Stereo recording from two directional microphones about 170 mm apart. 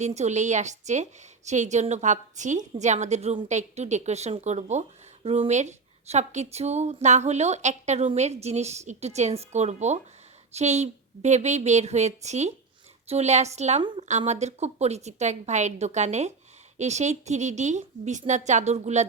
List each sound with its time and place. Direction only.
0.0 s a woman's voice: 40° right (ahead or behind)